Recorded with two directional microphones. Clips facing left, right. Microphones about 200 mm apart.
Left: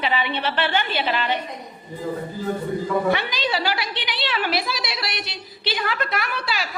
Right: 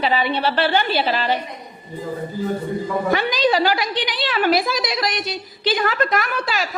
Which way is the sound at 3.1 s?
45° right (ahead or behind).